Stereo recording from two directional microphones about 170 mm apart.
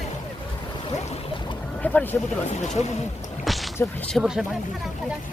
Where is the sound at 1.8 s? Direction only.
10° left (ahead or behind).